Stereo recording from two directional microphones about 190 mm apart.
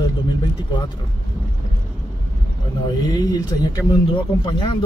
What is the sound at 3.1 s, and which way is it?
Speech, 20° left (ahead or behind).